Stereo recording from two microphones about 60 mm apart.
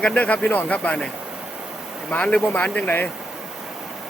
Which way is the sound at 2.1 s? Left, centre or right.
Left.